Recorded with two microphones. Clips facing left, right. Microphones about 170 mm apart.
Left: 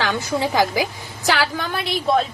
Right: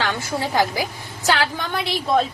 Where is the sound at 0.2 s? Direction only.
20° left (ahead or behind).